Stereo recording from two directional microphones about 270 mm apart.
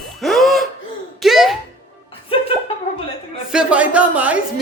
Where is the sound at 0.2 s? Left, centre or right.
Centre.